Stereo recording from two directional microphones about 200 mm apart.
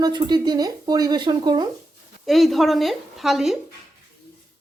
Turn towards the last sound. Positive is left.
turn(degrees=0)  # may be behind; listen again after turning